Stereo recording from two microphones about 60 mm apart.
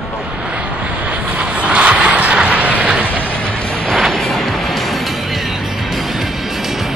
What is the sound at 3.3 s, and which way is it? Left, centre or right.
Music, centre.